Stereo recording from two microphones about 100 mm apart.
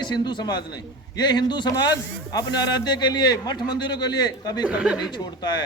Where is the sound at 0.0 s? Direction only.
50° left (ahead or behind).